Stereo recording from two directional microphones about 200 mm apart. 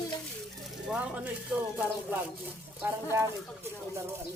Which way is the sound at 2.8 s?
15° right (ahead or behind).